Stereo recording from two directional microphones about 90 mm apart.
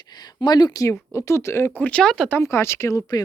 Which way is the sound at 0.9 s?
30° left (ahead or behind).